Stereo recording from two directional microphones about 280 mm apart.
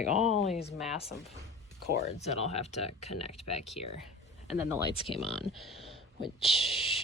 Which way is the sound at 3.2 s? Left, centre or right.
Left.